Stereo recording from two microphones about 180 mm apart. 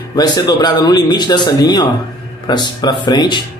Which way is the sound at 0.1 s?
20° left (ahead or behind).